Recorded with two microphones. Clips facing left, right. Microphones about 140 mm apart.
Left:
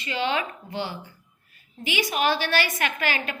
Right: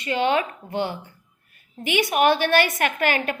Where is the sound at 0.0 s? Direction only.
50° right (ahead or behind).